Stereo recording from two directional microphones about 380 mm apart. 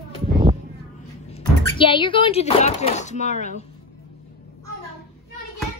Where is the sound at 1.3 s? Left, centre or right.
Centre.